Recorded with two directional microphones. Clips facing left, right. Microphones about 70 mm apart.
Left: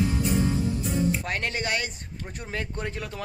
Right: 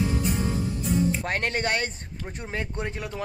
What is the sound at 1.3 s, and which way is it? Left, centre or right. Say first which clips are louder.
Speech: right 2 dB; right.